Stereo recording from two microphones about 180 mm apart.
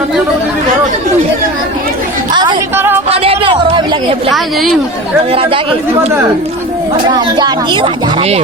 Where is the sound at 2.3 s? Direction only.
25° right (ahead or behind).